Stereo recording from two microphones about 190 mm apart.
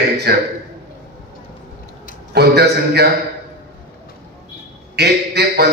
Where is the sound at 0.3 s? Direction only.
55° right (ahead or behind).